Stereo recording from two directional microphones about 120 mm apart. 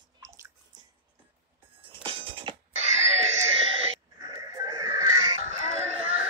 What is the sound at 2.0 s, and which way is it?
Music, 45° right (ahead or behind).